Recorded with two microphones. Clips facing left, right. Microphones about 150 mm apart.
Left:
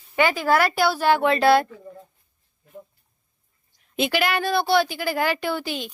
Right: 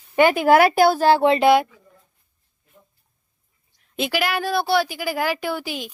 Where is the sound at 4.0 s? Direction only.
5° right (ahead or behind).